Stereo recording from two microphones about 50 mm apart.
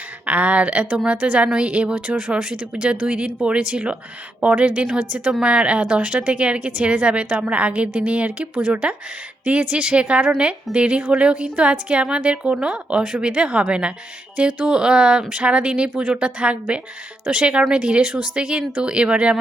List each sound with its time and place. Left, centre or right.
0.3 s a woman's voice: right